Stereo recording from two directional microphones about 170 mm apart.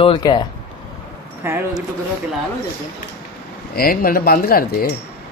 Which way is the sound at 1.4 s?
15° right (ahead or behind).